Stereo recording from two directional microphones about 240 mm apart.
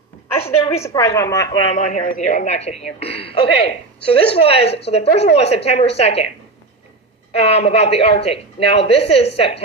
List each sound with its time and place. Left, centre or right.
0.3 s a woman's voice: left
0.8 s a woman's voice: centre
1.7 s a man's voice: left
7.4 s a man's voice: left